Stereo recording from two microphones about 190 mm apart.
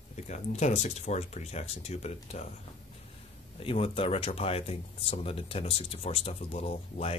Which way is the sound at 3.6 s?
30° left (ahead or behind).